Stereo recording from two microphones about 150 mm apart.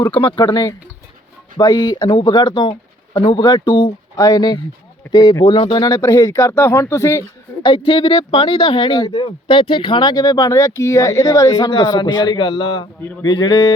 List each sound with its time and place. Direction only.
0.1 s speech: 35° left (ahead or behind); by 7.3 s 20° left (ahead or behind)
7.9 s speech: 35° left (ahead or behind)